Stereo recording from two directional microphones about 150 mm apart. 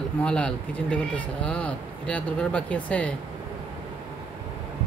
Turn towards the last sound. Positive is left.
turn(degrees=10)  # may be behind; listen again after turning